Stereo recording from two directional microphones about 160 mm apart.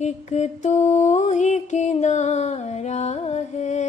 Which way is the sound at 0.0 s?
45° left (ahead or behind).